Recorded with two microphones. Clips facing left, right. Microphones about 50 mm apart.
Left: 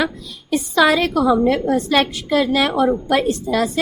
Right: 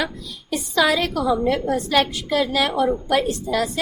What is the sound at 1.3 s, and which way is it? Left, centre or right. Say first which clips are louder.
Speech: left 3 dB; left.